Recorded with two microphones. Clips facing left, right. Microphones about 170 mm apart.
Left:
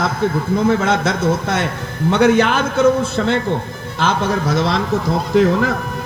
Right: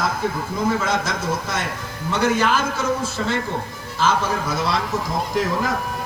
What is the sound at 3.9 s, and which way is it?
Speech, 75° left (ahead or behind).